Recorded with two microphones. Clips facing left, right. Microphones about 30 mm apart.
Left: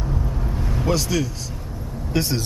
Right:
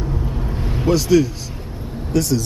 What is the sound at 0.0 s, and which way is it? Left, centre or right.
Vehicle, centre.